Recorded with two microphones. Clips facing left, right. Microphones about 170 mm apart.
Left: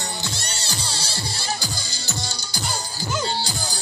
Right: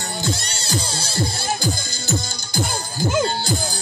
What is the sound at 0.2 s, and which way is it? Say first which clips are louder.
Music: right 6 dB; 50° right (ahead or behind).